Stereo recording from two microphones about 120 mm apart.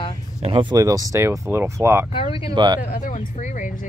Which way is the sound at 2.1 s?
50° left (ahead or behind).